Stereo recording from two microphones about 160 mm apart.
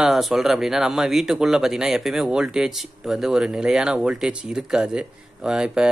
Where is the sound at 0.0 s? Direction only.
Centre (ahead or behind).